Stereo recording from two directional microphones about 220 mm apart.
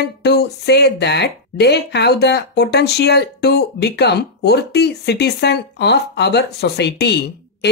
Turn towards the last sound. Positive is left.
turn(degrees=50)  # may be behind; listen again after turning